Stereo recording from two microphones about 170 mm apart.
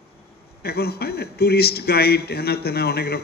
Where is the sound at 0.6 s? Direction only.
70° left (ahead or behind).